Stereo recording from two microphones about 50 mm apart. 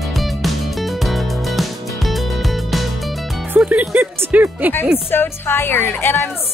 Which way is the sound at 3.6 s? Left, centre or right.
Right.